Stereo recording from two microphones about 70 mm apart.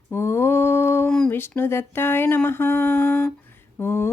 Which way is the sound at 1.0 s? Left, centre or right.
Centre.